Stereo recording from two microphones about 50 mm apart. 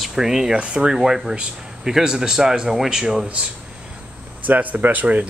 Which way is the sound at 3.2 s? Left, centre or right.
Right.